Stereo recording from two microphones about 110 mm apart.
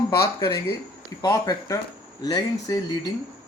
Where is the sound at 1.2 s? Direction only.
35° left (ahead or behind).